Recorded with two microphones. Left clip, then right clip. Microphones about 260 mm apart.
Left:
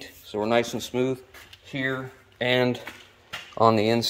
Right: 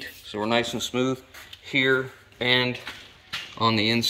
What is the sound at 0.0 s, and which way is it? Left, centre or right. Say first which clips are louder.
Speech: left 1 dB; centre.